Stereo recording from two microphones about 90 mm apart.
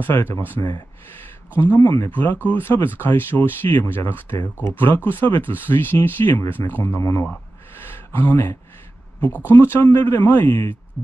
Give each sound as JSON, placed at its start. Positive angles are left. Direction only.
{"t": 0.0, "sound": "speech", "side_deg": 25}
{"t": 0.6, "sound": "speech", "side_deg": 45}
{"t": 2.0, "sound": "speech", "side_deg": 20}
{"t": 7.8, "sound": "a sound", "side_deg": 20}
{"t": 9.5, "sound": "speech", "side_deg": 20}